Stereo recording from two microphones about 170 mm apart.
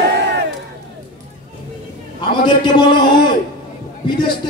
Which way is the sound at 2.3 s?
25° left (ahead or behind).